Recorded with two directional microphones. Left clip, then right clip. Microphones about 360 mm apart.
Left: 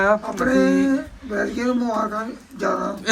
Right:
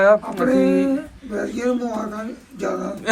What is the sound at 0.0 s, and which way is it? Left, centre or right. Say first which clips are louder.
Speech: right 4 dB; centre.